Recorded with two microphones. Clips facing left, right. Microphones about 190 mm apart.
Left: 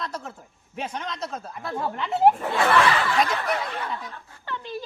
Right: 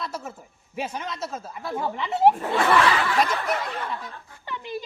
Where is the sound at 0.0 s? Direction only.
5° right (ahead or behind).